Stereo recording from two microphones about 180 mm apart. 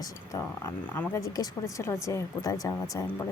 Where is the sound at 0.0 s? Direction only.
15° left (ahead or behind).